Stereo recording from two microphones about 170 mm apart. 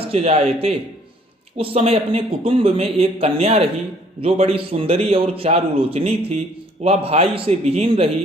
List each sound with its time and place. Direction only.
0.1 s a man's voice: 35° right (ahead or behind)